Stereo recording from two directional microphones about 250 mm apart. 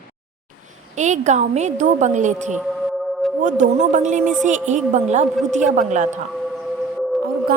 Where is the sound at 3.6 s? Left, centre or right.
Right.